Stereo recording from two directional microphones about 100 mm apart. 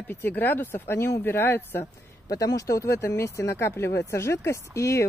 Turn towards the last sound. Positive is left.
turn(degrees=30)  # may be behind; listen again after turning